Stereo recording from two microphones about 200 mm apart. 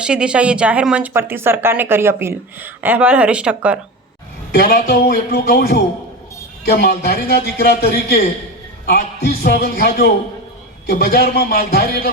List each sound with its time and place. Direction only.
0.0 s speech: 5° right (ahead or behind)
4.5 s a man's voice: 50° left (ahead or behind)